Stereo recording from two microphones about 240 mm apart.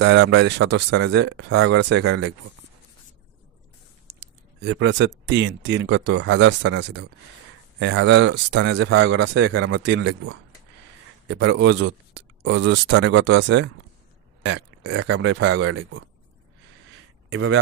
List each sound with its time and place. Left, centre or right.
0.0 s speech: right
4.1 s a sound: right
4.6 s speech: right
17.3 s a man's voice: right